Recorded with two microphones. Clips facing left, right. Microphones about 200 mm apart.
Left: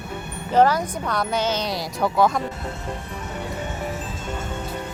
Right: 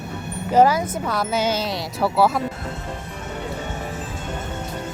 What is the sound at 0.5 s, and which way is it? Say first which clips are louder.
Speech: right 2 dB; 10° right (ahead or behind).